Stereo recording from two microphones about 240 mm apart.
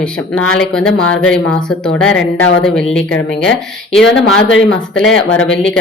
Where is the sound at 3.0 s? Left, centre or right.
Left.